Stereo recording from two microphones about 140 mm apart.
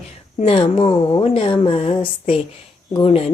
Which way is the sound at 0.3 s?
45° left (ahead or behind).